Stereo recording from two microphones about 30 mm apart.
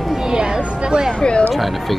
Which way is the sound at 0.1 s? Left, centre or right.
Centre.